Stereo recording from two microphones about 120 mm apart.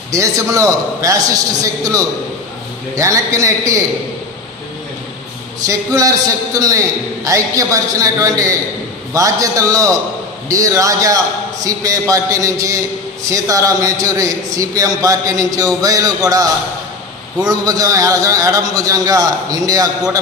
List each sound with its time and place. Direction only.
0.1 s a man's voice: 25° right (ahead or behind)
5.6 s a man's voice: 30° right (ahead or behind)